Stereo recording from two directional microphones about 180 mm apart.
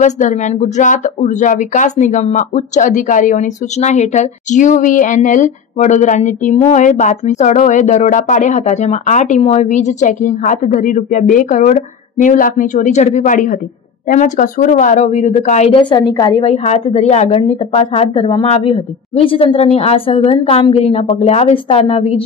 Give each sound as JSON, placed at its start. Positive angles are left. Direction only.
{"t": 0.0, "sound": "speech", "side_deg": 40}